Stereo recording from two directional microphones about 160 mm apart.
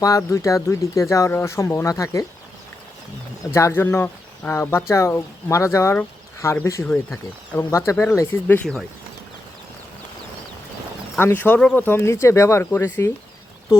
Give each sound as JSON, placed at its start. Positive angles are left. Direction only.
{"t": 0.0, "sound": "speech", "side_deg": 20}
{"t": 3.5, "sound": "speech", "side_deg": 15}
{"t": 11.2, "sound": "speech", "side_deg": 15}